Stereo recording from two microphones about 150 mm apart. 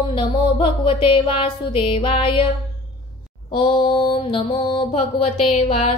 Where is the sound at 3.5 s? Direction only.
35° left (ahead or behind).